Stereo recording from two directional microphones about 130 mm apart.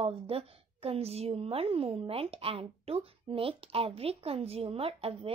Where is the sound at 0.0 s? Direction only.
50° right (ahead or behind).